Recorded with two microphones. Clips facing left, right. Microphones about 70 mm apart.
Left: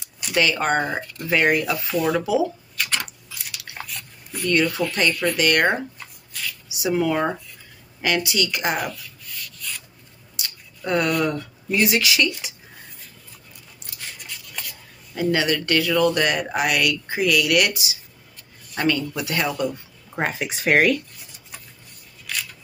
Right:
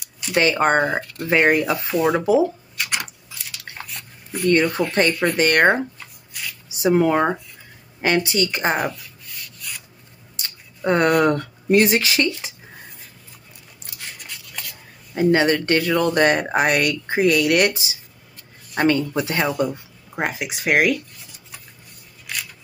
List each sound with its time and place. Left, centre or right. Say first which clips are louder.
0.4 s speech: right 3 dB; right
3.9 s speech: right 3 dB; right
10.3 s a sound: even; right
11.1 s speech: right 6 dB; right
11.8 s speech: right 2 dB; right
15.1 s speech: right 5 dB; right
20.2 s speech: even; centre